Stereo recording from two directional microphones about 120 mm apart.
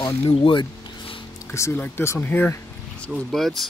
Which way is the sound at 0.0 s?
45° left (ahead or behind).